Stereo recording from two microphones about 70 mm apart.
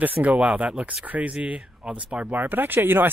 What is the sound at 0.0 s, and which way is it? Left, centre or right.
Speech, right.